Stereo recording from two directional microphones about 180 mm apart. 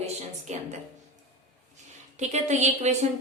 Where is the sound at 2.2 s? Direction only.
40° right (ahead or behind).